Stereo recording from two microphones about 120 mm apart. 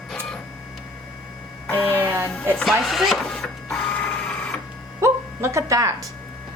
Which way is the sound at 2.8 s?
Centre (ahead or behind).